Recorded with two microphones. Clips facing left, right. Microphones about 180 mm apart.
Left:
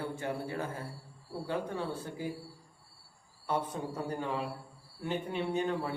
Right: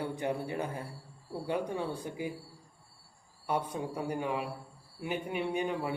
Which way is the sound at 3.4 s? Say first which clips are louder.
Right 1 dB; 10° right (ahead or behind).